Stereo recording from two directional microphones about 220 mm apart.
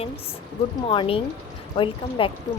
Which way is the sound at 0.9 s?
25° left (ahead or behind).